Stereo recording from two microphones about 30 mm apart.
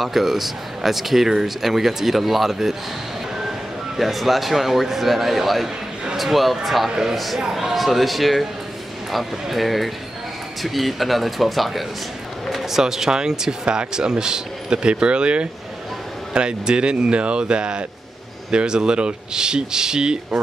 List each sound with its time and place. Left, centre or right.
0.0 s speech: centre
3.3 s a sound: centre
4.1 s speech: centre; by 20.3 s right